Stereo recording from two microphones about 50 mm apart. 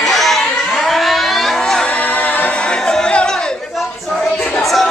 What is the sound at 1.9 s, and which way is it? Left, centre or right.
A capella, left.